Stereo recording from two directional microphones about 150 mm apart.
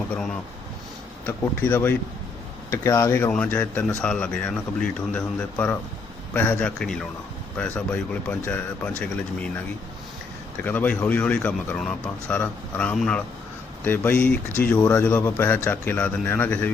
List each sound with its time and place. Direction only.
1.3 s speech: 15° left (ahead or behind)
10.6 s speech: 10° left (ahead or behind)